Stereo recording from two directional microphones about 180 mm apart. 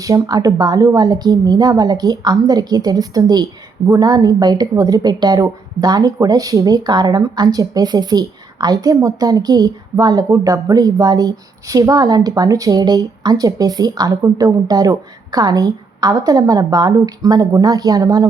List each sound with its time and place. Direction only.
0.0 s a woman's voice: 20° right (ahead or behind)